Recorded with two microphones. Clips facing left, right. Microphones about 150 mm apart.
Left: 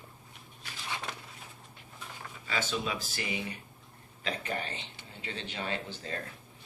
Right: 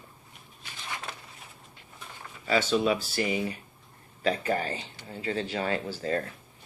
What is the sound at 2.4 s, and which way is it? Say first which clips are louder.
Speech: right 9 dB; 35° right (ahead or behind).